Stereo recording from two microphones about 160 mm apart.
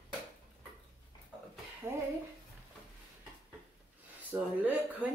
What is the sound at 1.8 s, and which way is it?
Speech, 15° right (ahead or behind).